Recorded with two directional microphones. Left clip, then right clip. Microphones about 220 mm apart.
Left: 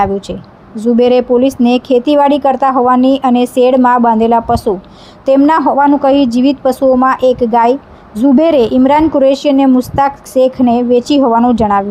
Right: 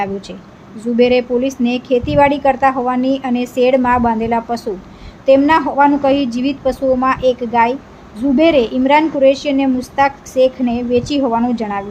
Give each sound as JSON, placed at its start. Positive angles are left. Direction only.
{"t": 0.0, "sound": "a woman's voice", "side_deg": 25}